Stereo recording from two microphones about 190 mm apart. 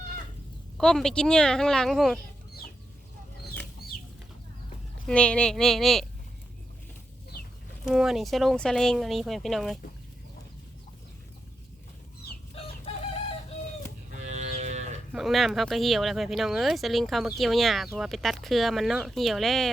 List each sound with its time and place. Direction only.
0.8 s speech: 5° left (ahead or behind)
5.0 s speech: 5° left (ahead or behind)
7.3 s chicken: 55° left (ahead or behind)
7.9 s speech: centre (ahead or behind)
12.2 s chicken: 55° left (ahead or behind)
14.1 s a sound: 40° right (ahead or behind)
15.1 s speech: centre (ahead or behind)